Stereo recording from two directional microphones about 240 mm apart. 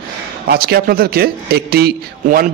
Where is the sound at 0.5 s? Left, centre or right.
Right.